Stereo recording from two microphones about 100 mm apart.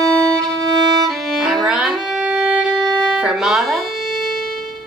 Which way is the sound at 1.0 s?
Centre (ahead or behind).